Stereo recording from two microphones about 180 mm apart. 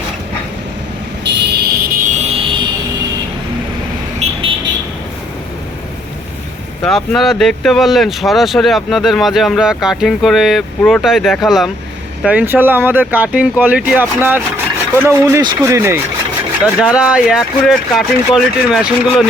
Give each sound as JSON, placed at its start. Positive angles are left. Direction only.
{"t": 1.2, "sound": "a sound", "side_deg": -70}
{"t": 4.2, "sound": "vehicle", "side_deg": -35}
{"t": 6.8, "sound": "speech", "side_deg": 0}